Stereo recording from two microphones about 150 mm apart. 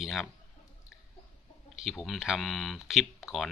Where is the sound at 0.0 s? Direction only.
Centre (ahead or behind).